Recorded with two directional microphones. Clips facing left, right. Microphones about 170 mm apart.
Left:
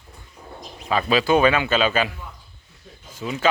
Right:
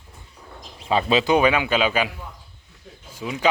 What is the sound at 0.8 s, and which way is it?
A man's voice, 25° right (ahead or behind).